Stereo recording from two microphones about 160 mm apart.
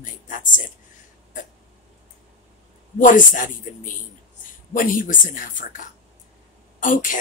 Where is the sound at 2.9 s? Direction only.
55° left (ahead or behind).